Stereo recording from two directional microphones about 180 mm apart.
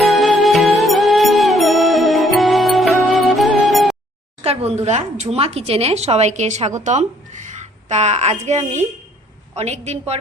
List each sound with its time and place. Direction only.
0.0 s music: centre (ahead or behind)
4.4 s a woman's voice: 35° right (ahead or behind)